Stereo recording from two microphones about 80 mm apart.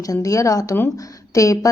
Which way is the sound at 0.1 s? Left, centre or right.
Left.